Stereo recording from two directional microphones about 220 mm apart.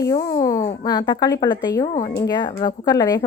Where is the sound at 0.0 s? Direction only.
15° left (ahead or behind).